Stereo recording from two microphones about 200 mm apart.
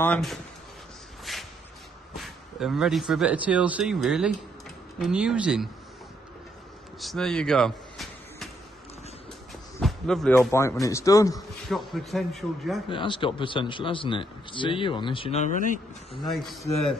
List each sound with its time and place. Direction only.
0.0 s speech: 5° left (ahead or behind)
1.3 s shuffle: centre (ahead or behind)
2.1 s speech: centre (ahead or behind)
7.0 s a sound: centre (ahead or behind)
9.8 s a man's voice: centre (ahead or behind)
11.3 s speech: centre (ahead or behind)
12.9 s a man's voice: 25° left (ahead or behind)
16.2 s speech: centre (ahead or behind)